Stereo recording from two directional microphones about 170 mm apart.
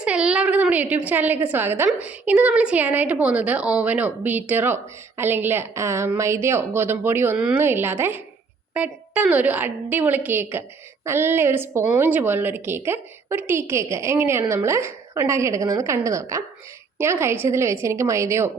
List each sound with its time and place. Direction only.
0.0 s a woman's voice: 5° right (ahead or behind)